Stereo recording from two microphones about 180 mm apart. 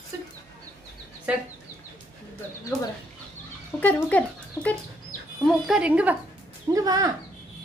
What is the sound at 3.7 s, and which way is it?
Speech, 10° left (ahead or behind).